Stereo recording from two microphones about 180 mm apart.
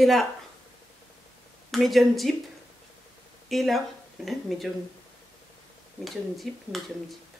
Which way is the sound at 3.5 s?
Centre (ahead or behind).